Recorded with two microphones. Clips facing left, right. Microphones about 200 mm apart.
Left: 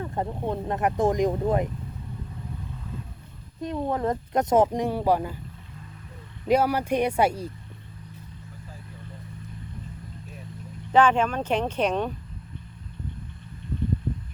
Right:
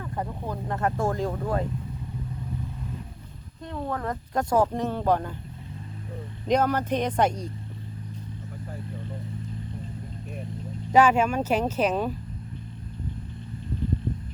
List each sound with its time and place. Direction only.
0.0 s speech: 25° left (ahead or behind)
3.6 s speech: 20° left (ahead or behind)
6.5 s speech: 10° left (ahead or behind)
10.9 s speech: 10° right (ahead or behind)